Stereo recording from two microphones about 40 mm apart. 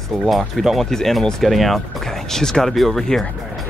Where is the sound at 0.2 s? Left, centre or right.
Centre.